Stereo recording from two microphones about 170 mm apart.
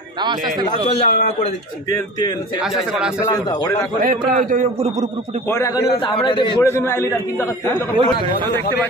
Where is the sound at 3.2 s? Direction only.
25° left (ahead or behind).